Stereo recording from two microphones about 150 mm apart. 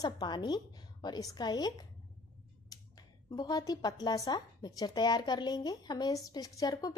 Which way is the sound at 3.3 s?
25° left (ahead or behind).